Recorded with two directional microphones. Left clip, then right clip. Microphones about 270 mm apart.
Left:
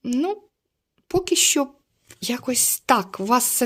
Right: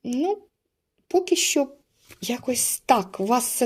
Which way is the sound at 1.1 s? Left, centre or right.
Left.